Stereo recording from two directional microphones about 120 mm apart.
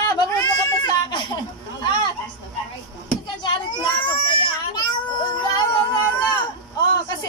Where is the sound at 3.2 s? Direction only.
40° left (ahead or behind).